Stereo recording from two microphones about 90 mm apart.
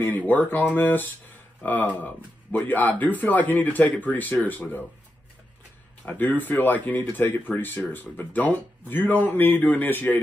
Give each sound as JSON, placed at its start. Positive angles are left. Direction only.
{"t": 0.3, "sound": "speech", "side_deg": 20}
{"t": 6.0, "sound": "speech", "side_deg": 20}